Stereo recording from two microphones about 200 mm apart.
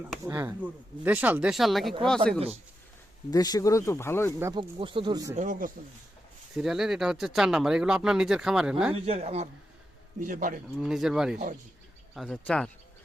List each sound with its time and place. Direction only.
0.3 s speech: 15° right (ahead or behind); by 2.4 s 5° left (ahead or behind)
3.3 s speech: 20° left (ahead or behind)
4.4 s speech: 15° right (ahead or behind)
4.8 s speech: 25° right (ahead or behind)
5.4 s speech: 40° right (ahead or behind)
6.6 s speech: centre (ahead or behind)
8.9 s a man's voice: 30° right (ahead or behind)
10.8 s speech: centre (ahead or behind)